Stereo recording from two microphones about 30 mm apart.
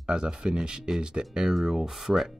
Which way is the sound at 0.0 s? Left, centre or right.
Right.